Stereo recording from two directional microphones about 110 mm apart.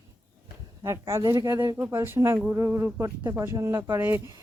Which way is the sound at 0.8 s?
25° right (ahead or behind).